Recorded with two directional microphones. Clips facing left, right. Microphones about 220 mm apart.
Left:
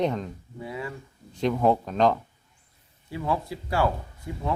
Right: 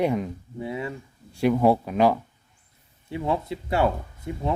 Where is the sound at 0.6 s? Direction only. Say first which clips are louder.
Right 4 dB; 25° right (ahead or behind).